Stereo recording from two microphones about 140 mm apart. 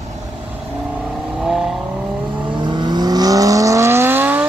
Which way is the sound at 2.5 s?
35° right (ahead or behind).